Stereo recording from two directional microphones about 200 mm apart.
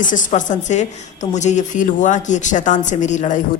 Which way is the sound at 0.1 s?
40° left (ahead or behind).